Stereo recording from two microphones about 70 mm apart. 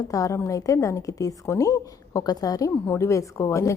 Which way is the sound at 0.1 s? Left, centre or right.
Left.